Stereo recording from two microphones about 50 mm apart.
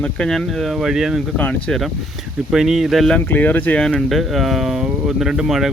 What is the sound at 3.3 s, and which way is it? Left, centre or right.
Speech, left.